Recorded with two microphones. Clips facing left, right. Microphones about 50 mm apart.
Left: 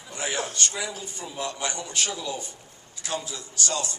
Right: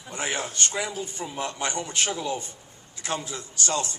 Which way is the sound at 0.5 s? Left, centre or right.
Right.